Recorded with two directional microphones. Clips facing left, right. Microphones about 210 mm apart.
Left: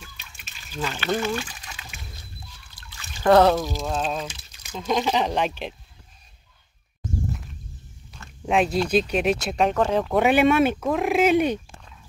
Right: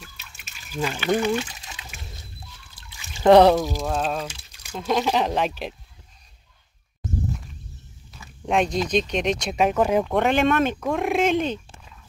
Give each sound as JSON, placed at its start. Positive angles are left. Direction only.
{"t": 0.7, "sound": "speech", "side_deg": -10}
{"t": 3.2, "sound": "speech", "side_deg": -15}
{"t": 8.1, "sound": "speech", "side_deg": 0}
{"t": 10.0, "sound": "speech", "side_deg": 5}